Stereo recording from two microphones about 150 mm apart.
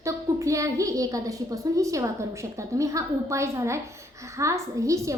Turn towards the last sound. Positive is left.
turn(degrees=-20)  # may be behind; listen again after turning